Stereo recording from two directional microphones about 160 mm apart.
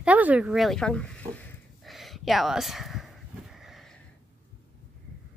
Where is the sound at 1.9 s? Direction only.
Centre (ahead or behind).